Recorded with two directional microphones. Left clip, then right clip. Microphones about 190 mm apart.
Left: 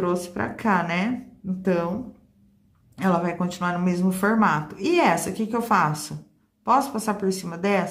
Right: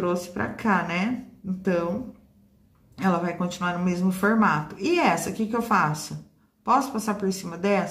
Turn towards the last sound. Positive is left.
turn(degrees=15)  # may be behind; listen again after turning